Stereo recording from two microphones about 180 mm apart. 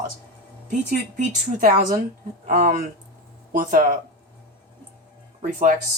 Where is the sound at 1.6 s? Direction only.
50° right (ahead or behind).